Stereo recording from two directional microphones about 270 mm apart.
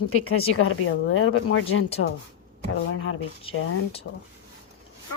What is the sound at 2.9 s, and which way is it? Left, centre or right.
Speech, left.